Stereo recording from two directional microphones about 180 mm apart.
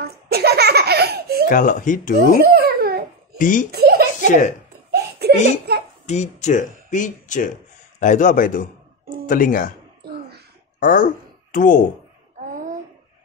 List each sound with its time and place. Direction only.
0.0 s laughter: 60° right (ahead or behind)
1.5 s speech: 45° left (ahead or behind)
2.1 s babbling: 55° right (ahead or behind)
3.3 s speech: 50° left (ahead or behind)
3.7 s giggle: 60° right (ahead or behind)
6.0 s speech: 40° left (ahead or behind)
10.8 s speech: 50° left (ahead or behind)
12.4 s a sound: 45° right (ahead or behind)